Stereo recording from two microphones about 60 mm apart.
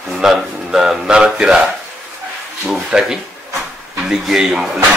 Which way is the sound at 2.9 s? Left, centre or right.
Centre.